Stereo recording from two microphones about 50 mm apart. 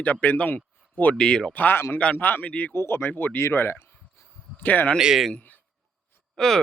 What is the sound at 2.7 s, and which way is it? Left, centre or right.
Speech, left.